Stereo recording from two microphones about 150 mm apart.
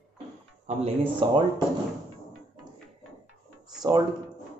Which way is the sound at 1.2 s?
30° right (ahead or behind).